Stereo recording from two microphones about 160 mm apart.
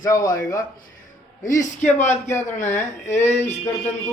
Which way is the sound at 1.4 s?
55° left (ahead or behind).